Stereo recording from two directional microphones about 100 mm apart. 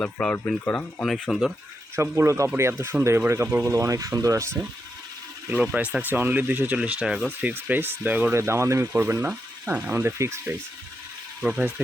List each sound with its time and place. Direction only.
0.0 s speech: 10° left (ahead or behind)
1.0 s speech: 5° left (ahead or behind)
2.0 s speech: 25° right (ahead or behind)
5.7 s speech: 15° right (ahead or behind)
7.4 s speech: 20° right (ahead or behind)
8.4 s speech: 25° right (ahead or behind)
11.3 s speech: 10° right (ahead or behind)